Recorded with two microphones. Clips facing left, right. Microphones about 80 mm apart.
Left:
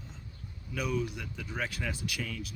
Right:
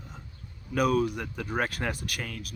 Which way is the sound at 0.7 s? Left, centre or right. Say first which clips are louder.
Right 8 dB; right.